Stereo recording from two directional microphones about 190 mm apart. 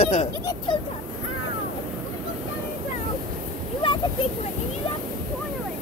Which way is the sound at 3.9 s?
25° left (ahead or behind).